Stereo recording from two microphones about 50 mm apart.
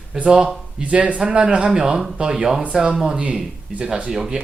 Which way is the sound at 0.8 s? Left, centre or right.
Right.